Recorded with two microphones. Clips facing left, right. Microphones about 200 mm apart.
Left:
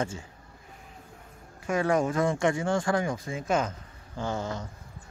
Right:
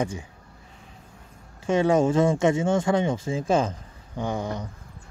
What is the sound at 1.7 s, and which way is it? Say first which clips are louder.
Speech: right 5 dB; 25° right (ahead or behind).